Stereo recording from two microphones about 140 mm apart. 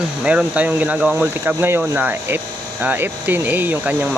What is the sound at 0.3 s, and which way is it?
Speech, 10° right (ahead or behind).